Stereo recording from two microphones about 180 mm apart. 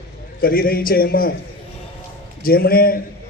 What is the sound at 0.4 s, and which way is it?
Speech, 55° left (ahead or behind).